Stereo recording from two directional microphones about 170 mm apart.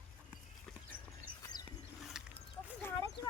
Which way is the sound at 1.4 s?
25° left (ahead or behind).